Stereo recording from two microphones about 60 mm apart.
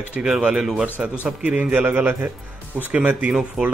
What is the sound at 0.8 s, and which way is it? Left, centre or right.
Speech, right.